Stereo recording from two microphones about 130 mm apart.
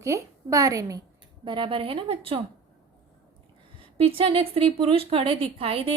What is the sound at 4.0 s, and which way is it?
A woman's voice, 45° right (ahead or behind).